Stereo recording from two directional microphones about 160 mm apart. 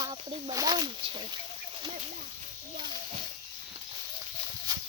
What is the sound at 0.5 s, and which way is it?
Speech, 25° right (ahead or behind).